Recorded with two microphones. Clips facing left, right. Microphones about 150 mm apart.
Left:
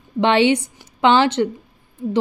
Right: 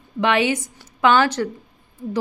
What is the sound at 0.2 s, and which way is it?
Speech, 30° left (ahead or behind).